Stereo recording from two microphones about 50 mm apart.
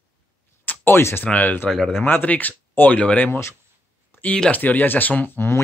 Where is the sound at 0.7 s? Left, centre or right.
Left.